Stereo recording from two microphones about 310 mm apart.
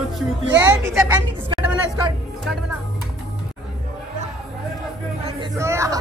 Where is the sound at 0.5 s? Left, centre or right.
Centre.